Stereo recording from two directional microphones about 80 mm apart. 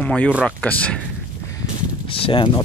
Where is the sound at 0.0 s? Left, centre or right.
Centre.